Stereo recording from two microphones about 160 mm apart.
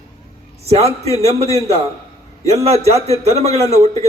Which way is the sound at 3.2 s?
40° right (ahead or behind).